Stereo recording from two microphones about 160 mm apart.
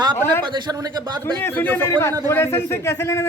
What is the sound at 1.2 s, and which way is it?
Speech, 15° left (ahead or behind).